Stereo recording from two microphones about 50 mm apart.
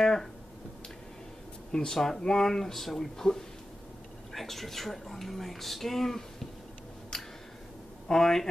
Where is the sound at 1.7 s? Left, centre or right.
Centre.